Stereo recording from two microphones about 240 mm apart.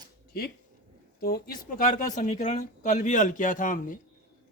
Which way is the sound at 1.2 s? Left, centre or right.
Left.